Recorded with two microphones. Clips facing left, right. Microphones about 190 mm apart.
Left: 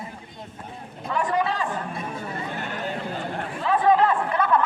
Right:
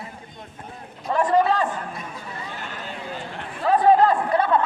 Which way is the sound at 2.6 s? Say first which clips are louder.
Left 5 dB; 60° left (ahead or behind).